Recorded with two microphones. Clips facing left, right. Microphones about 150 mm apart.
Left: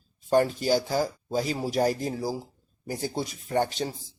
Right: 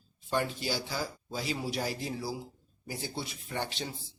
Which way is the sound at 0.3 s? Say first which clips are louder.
Left 10 dB; 45° left (ahead or behind).